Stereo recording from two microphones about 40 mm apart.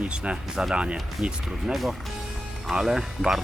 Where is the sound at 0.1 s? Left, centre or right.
Right.